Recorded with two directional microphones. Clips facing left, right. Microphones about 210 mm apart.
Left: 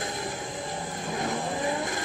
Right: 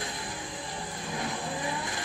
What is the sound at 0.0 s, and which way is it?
Vehicle, 45° left (ahead or behind).